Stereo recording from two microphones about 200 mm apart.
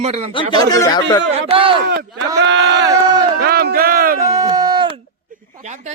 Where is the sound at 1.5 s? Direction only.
25° right (ahead or behind).